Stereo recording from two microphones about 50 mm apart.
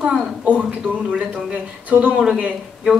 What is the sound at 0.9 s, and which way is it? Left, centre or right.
A man's voice, right.